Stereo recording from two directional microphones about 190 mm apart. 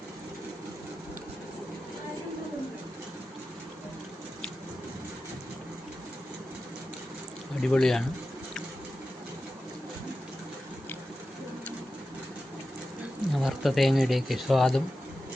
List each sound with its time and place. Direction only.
7.6 s speech: 5° left (ahead or behind)
13.3 s speech: centre (ahead or behind)